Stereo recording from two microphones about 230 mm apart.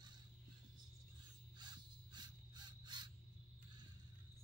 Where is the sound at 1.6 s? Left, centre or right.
Centre.